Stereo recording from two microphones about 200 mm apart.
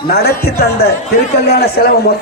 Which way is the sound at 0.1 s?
50° left (ahead or behind).